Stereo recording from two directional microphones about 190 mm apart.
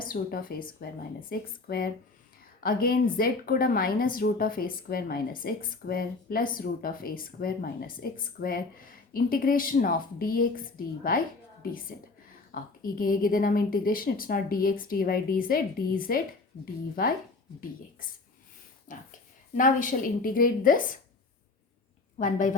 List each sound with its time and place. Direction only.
0.0 s a woman's voice: 50° left (ahead or behind)
12.5 s a woman's voice: 50° left (ahead or behind)
18.9 s a woman's voice: 45° left (ahead or behind)
22.2 s a woman's voice: 40° left (ahead or behind)